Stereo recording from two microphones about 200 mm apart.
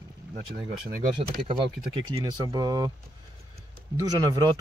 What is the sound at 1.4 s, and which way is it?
Speech, 25° right (ahead or behind).